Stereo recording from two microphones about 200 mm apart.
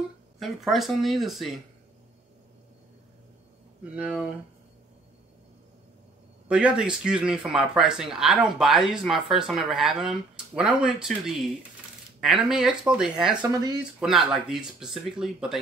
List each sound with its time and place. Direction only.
0.4 s speech: centre (ahead or behind)
3.9 s speech: 5° right (ahead or behind)
6.5 s speech: 5° right (ahead or behind)
13.4 s speech: 20° right (ahead or behind)
13.9 s speech: centre (ahead or behind)